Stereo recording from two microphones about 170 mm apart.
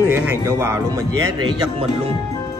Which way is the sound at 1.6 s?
35° right (ahead or behind).